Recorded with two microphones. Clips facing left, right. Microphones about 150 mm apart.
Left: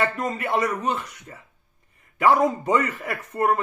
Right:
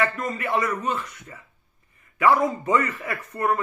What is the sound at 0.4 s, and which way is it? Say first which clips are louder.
Speech: left 1 dB; 35° left (ahead or behind).